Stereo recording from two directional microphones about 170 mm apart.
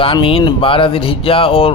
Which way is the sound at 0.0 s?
30° left (ahead or behind).